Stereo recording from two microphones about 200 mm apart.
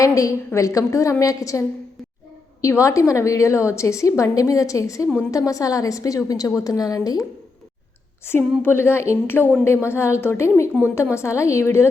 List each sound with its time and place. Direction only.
0.0 s a woman's voice: 15° left (ahead or behind)